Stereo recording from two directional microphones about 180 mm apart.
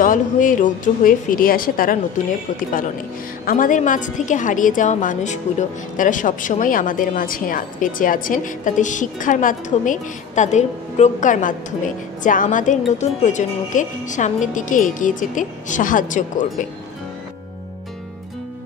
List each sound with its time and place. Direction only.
0.0 s a woman's voice: 50° left (ahead or behind)
3.4 s a woman's voice: 50° left (ahead or behind)